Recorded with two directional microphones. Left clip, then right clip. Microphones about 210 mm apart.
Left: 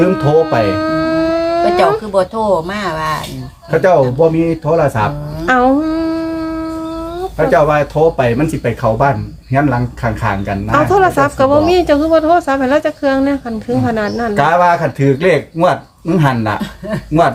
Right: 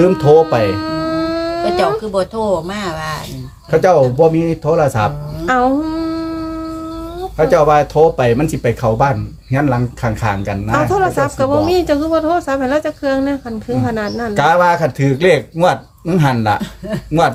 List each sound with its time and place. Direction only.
0.2 s speech: 50° right (ahead or behind)
0.7 s howl: 10° left (ahead or behind)
1.6 s speech: 5° right (ahead or behind)
3.7 s speech: 50° right (ahead or behind)
5.5 s a sound: 10° left (ahead or behind)
7.3 s speech: 50° right (ahead or behind)
10.7 s speech: 10° left (ahead or behind)
14.3 s speech: 50° right (ahead or behind)